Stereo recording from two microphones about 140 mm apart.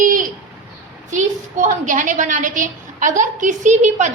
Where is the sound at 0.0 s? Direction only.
75° right (ahead or behind).